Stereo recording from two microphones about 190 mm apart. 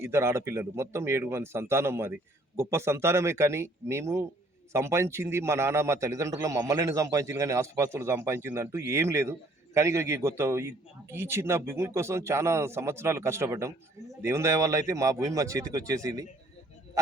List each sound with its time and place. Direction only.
0.0 s a man's voice: 15° right (ahead or behind)